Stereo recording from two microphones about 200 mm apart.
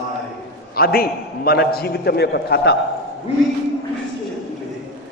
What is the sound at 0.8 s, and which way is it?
A man's voice, 50° left (ahead or behind).